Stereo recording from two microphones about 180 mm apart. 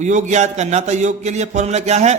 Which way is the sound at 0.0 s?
40° right (ahead or behind).